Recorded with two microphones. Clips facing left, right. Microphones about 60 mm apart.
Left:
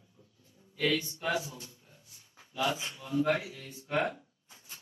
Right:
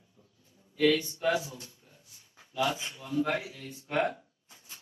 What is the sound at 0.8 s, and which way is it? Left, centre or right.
Speech, centre.